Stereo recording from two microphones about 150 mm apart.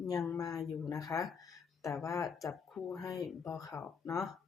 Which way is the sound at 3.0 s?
25° left (ahead or behind).